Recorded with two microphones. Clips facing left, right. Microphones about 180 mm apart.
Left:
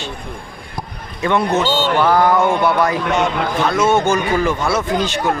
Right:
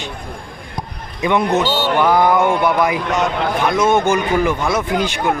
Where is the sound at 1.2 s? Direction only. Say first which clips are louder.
Even; 15° right (ahead or behind).